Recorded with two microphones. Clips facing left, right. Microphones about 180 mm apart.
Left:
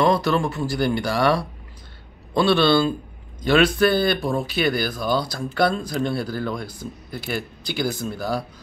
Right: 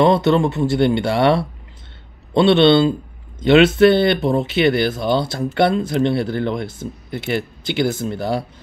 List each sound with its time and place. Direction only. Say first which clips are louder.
0.0 s speech: right 5 dB; 25° right (ahead or behind)